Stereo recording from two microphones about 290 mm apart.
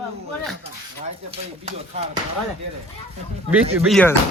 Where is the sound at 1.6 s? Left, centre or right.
Right.